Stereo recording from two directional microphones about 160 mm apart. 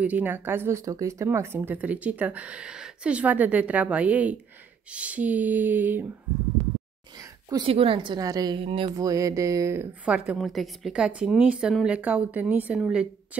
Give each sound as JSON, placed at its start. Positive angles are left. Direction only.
{"t": 0.0, "sound": "speech", "side_deg": -10}
{"t": 7.2, "sound": "a sound", "side_deg": -20}
{"t": 7.6, "sound": "a woman's voice", "side_deg": -35}
{"t": 8.5, "sound": "speech", "side_deg": -35}
{"t": 8.9, "sound": "speech", "side_deg": -20}